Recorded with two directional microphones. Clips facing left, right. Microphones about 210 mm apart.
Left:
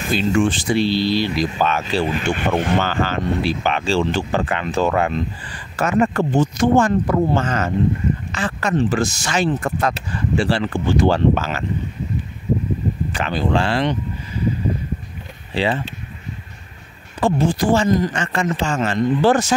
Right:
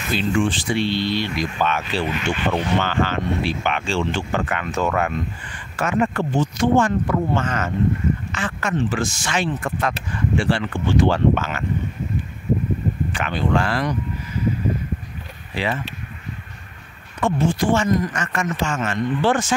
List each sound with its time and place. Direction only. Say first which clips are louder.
0.1 s speech: left 3 dB; 45° left (ahead or behind)
2.3 s speech: left 1 dB; 45° left (ahead or behind); by 5.2 s 30° left (ahead or behind)
5.8 s speech: left 3 dB; 40° left (ahead or behind)
13.1 s speech: left 2 dB; 35° left (ahead or behind)
15.5 s speech: left 4 dB; 30° left (ahead or behind)
17.2 s speech: left 2 dB; 35° left (ahead or behind)